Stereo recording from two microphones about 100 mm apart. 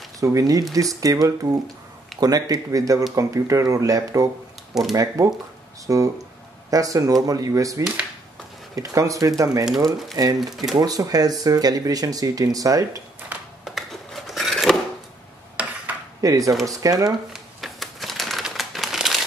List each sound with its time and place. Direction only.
0.2 s speech: 35° right (ahead or behind)
10.4 s speech: centre (ahead or behind)
10.8 s speech: 40° right (ahead or behind)
13.3 s a sound: 15° right (ahead or behind)
13.7 s scissors: centre (ahead or behind)
15.6 s dishes: 15° right (ahead or behind)
16.2 s speech: 35° right (ahead or behind)
17.3 s crumpling: centre (ahead or behind)